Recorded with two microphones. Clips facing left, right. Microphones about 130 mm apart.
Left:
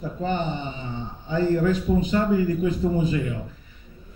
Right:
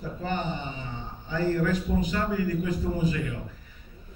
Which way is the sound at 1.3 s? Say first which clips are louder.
Left 4 dB; 20° left (ahead or behind).